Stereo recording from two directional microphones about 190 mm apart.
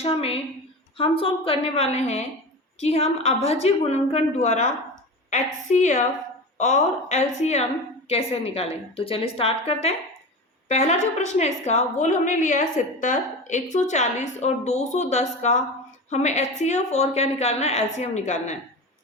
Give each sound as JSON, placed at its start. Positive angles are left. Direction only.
{"t": 0.0, "sound": "a woman's voice", "side_deg": 30}